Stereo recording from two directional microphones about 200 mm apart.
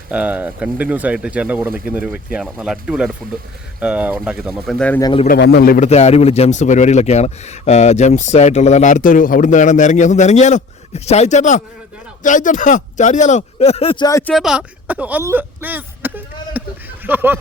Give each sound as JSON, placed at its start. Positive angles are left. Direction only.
{"t": 0.1, "sound": "speech", "side_deg": -5}
{"t": 4.9, "sound": "a man's voice", "side_deg": 20}
{"t": 5.4, "sound": "a man's voice", "side_deg": 55}
{"t": 14.3, "sound": "speech", "side_deg": -5}